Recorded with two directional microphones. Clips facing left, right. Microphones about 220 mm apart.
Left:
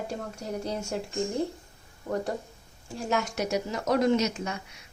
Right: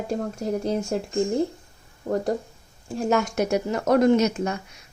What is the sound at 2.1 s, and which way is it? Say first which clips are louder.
Speech: right 6 dB; 50° right (ahead or behind).